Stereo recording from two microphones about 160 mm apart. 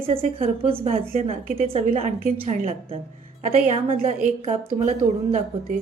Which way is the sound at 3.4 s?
50° right (ahead or behind).